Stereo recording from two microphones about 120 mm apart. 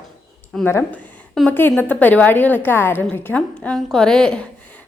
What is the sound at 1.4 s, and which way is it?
Speech, centre (ahead or behind).